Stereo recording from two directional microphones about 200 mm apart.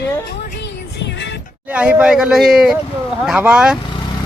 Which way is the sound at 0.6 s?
60° left (ahead or behind).